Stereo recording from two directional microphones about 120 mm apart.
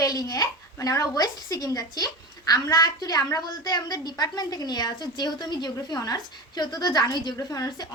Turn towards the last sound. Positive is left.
turn(degrees=30)  # may be behind; listen again after turning